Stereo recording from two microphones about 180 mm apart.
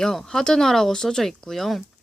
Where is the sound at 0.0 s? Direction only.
Centre (ahead or behind).